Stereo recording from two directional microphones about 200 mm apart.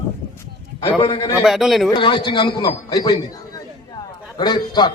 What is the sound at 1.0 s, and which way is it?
Speech, 30° left (ahead or behind).